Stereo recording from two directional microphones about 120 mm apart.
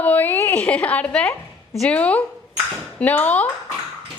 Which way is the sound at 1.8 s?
10° left (ahead or behind).